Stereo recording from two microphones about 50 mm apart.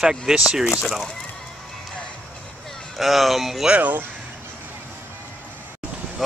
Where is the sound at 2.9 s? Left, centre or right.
Centre.